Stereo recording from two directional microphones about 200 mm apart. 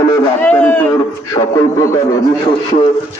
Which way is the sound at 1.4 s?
15° left (ahead or behind).